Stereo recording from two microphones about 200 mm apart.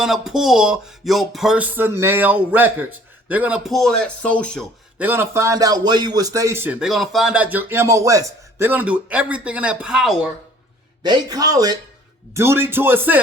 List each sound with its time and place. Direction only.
0.0 s speech: centre (ahead or behind)
4.9 s a man's voice: 10° right (ahead or behind)
11.0 s a man's voice: 20° right (ahead or behind)